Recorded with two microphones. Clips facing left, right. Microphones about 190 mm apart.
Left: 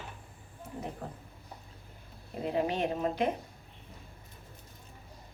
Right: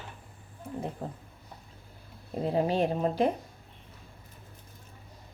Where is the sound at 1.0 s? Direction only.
25° right (ahead or behind).